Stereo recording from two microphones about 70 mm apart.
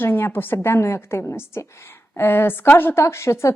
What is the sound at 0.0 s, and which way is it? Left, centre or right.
A woman's voice, left.